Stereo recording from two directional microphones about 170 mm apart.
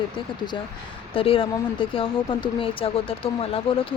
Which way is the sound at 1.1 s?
30° left (ahead or behind).